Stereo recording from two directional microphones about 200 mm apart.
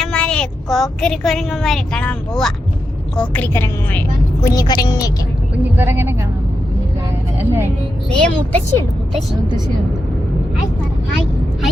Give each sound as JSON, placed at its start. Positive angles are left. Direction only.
{"t": 0.0, "sound": "a woman's voice", "side_deg": 5}
{"t": 4.4, "sound": "a woman's voice", "side_deg": 20}
{"t": 5.7, "sound": "speech", "side_deg": -10}
{"t": 7.3, "sound": "speech", "side_deg": -10}
{"t": 8.1, "sound": "a woman's voice", "side_deg": 5}